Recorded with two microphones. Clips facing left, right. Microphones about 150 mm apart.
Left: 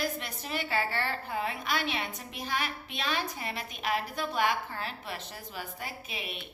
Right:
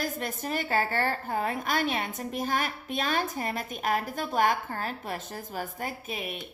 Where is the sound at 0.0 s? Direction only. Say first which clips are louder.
Right 3 dB; 45° right (ahead or behind).